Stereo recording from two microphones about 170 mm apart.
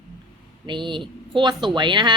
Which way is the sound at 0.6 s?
30° right (ahead or behind).